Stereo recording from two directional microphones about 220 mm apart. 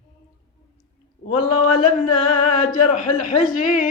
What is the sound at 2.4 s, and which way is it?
Speech, 35° left (ahead or behind).